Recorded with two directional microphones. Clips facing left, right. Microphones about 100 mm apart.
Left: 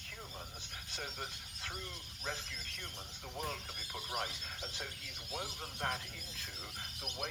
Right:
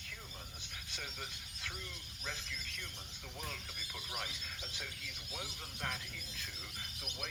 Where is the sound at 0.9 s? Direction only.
35° left (ahead or behind).